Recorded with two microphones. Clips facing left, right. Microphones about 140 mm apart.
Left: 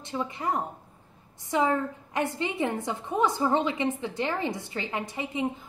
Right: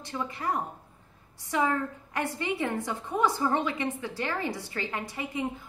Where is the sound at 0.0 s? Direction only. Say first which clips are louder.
Left 2 dB; 20° left (ahead or behind).